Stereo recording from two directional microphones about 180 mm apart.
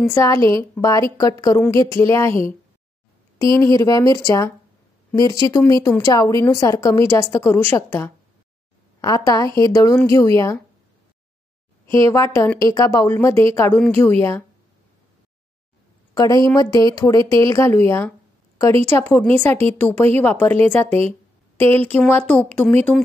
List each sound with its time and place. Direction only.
0.1 s a woman's voice: 15° left (ahead or behind)
3.5 s a woman's voice: 15° left (ahead or behind)
11.8 s a woman's voice: 15° left (ahead or behind)
16.2 s a woman's voice: 20° left (ahead or behind)